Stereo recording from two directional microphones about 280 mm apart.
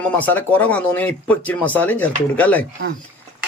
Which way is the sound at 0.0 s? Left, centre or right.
Centre.